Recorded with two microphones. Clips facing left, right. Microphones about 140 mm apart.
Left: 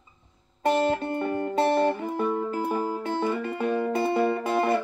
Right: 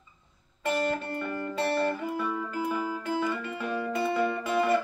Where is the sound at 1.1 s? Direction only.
20° left (ahead or behind).